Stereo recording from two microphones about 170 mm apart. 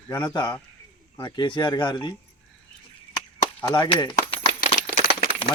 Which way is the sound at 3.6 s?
25° left (ahead or behind).